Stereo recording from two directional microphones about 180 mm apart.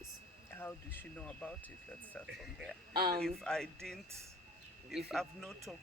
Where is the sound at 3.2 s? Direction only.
5° left (ahead or behind).